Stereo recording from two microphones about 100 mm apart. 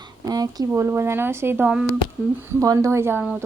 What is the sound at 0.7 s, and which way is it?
A woman's voice, 25° right (ahead or behind).